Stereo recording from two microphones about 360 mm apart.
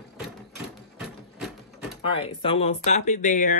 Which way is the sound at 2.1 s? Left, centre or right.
Centre.